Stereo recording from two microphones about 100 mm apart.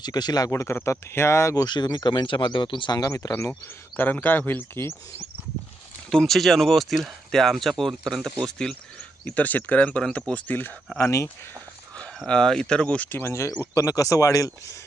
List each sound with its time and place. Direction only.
0.0 s speech: 45° left (ahead or behind)
0.5 s speech: 25° left (ahead or behind)
1.6 s speech: 45° left (ahead or behind); by 3.5 s 30° left (ahead or behind)
3.9 s speech: 20° left (ahead or behind)
6.1 s speech: 5° left (ahead or behind)
10.9 s speech: 25° left (ahead or behind)
12.2 s speech: 5° left (ahead or behind); by 14.8 s 35° left (ahead or behind)